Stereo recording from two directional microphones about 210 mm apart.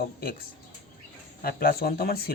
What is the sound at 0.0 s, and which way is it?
Speech, 45° left (ahead or behind).